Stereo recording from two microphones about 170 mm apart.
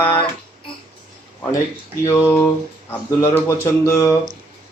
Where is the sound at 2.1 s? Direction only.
10° left (ahead or behind).